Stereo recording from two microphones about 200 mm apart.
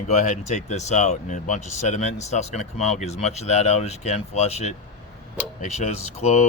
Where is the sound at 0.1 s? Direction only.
35° left (ahead or behind).